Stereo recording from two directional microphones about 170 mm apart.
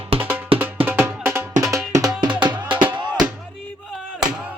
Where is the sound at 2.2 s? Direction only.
5° right (ahead or behind).